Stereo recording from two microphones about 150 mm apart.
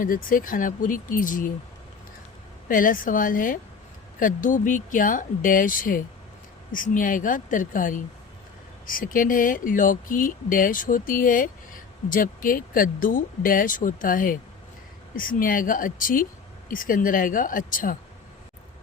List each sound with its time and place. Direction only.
0.0 s speech: 65° left (ahead or behind)
2.6 s speech: 65° left (ahead or behind)